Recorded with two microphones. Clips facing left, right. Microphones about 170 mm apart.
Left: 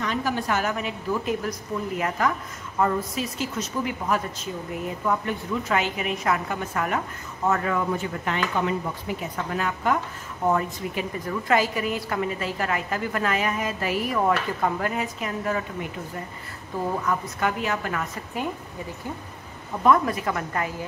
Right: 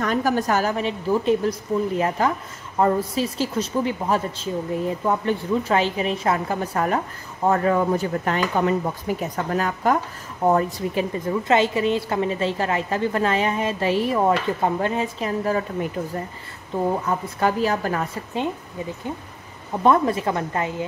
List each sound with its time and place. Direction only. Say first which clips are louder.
0.0 s a woman's voice: right 5 dB; 45° right (ahead or behind)
16.9 s a woman's voice: right 2 dB; 30° right (ahead or behind)
19.8 s a woman's voice: right 2 dB; 25° right (ahead or behind)